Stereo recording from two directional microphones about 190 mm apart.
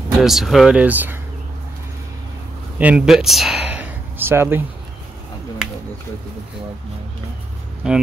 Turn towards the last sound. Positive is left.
turn(degrees=-5)  # may be behind; listen again after turning